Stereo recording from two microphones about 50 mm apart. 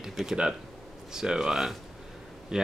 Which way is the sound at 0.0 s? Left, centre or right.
Centre.